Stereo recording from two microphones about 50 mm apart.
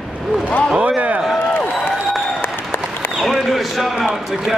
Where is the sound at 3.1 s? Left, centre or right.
Centre.